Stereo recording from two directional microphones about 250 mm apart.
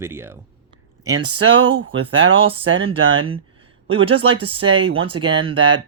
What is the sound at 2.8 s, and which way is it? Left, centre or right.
Speech, right.